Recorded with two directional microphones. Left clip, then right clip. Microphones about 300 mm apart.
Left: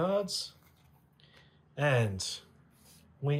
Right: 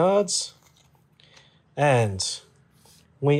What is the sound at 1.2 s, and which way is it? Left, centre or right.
Computer keyboard, centre.